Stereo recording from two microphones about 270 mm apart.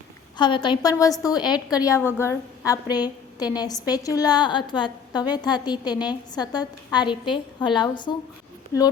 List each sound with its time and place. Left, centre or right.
0.3 s a woman's voice: centre
8.7 s speech: centre